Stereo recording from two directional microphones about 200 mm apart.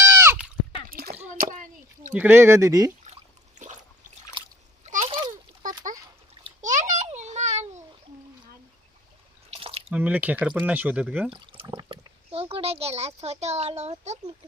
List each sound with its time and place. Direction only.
0.0 s a sound: 10° right (ahead or behind)
0.9 s a sound: 45° right (ahead or behind)
2.1 s speech: 10° right (ahead or behind)
4.4 s splash: 25° right (ahead or behind)
6.6 s babbling: 40° right (ahead or behind)
9.6 s drip: 30° right (ahead or behind)
9.9 s speech: 10° right (ahead or behind)
11.3 s speech: 25° right (ahead or behind)
11.9 s a child's voice: 30° right (ahead or behind)